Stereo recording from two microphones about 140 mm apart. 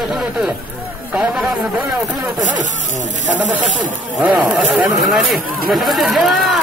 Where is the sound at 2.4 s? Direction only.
60° right (ahead or behind).